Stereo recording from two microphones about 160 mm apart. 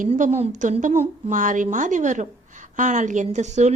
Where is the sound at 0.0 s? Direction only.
50° right (ahead or behind).